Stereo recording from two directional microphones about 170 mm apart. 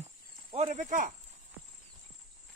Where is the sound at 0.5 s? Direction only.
35° right (ahead or behind).